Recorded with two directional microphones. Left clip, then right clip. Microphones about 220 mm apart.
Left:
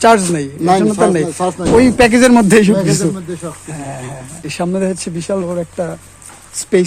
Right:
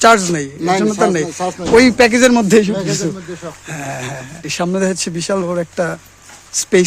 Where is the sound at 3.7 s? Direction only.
15° right (ahead or behind).